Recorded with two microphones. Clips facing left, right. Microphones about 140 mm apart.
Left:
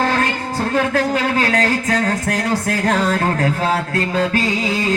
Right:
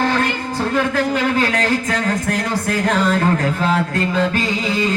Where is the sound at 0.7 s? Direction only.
40° left (ahead or behind).